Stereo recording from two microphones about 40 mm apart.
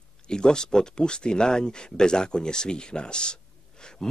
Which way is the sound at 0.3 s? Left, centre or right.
Centre.